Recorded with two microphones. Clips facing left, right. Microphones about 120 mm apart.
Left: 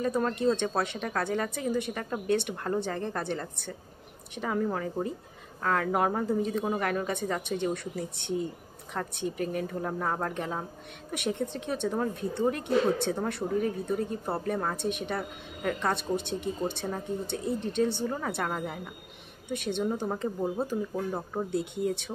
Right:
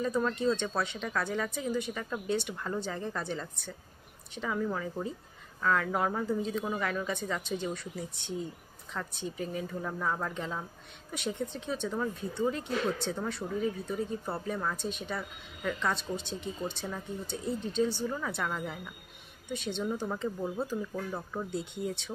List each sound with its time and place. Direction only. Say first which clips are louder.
0.0 s a woman's voice: left 2 dB; 55° left (ahead or behind)
4.4 s a woman's voice: left 3 dB; 50° left (ahead or behind)
18.0 s a woman's voice: left 3 dB; 45° left (ahead or behind); by 19.8 s 60° left (ahead or behind)
20.3 s speech: left 4 dB; 25° left (ahead or behind)
21.1 s speech: left 4 dB; 40° left (ahead or behind)
21.5 s a woman's voice: left 7 dB; 60° left (ahead or behind)